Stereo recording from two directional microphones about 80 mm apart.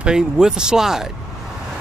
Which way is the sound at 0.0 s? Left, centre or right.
Centre.